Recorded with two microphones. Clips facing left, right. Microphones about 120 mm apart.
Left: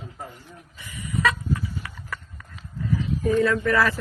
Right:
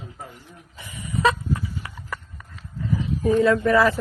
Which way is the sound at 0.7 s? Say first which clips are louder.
Even; 25° right (ahead or behind).